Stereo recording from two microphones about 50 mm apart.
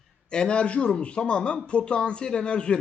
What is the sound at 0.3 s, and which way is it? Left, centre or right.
Speech, centre.